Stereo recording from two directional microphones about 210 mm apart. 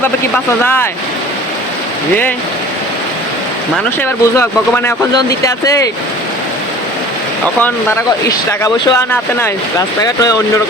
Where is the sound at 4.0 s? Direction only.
10° left (ahead or behind).